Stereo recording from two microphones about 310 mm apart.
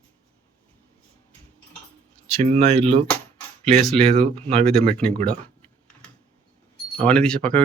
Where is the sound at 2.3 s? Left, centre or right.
Centre.